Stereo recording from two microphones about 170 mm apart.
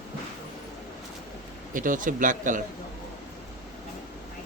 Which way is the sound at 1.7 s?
50° right (ahead or behind).